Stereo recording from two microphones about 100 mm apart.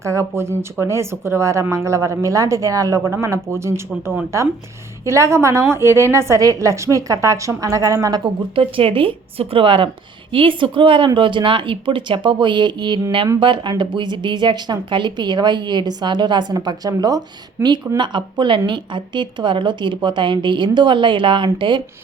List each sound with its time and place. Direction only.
0.0 s a woman's voice: 30° right (ahead or behind)
8.2 s a woman's voice: 60° right (ahead or behind)